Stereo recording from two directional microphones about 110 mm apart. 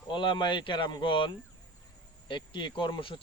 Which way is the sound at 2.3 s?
45° left (ahead or behind).